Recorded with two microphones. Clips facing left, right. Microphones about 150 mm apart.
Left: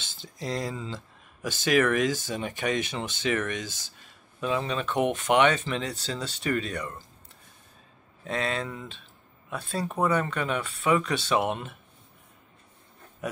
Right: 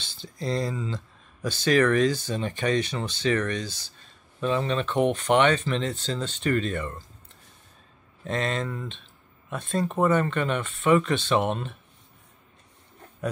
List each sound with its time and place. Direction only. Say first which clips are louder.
0.2 s speech: right 3 dB; 15° left (ahead or behind)
8.2 s speech: right 2 dB; 5° left (ahead or behind)